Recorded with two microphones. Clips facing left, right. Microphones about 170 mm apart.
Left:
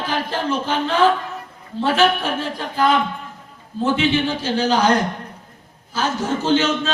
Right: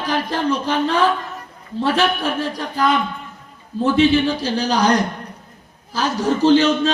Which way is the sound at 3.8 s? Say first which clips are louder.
Right 4 dB; 35° right (ahead or behind).